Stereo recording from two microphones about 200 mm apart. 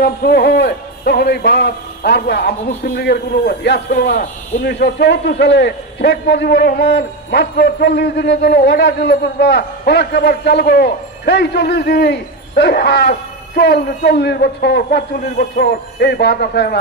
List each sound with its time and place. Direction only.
0.0 s a man's voice: 55° left (ahead or behind)